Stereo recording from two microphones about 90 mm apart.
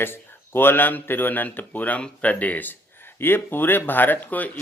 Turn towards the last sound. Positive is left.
turn(degrees=20)  # may be behind; listen again after turning